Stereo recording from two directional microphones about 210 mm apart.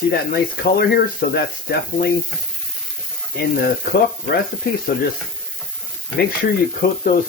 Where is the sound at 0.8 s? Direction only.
50° left (ahead or behind).